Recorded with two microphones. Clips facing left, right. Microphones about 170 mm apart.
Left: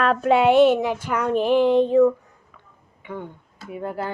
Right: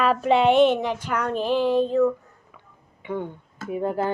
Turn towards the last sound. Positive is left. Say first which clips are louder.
# right 4 dB
turn(degrees=-20)  # may be behind; listen again after turning